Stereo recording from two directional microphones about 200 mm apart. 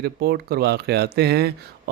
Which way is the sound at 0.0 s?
50° right (ahead or behind).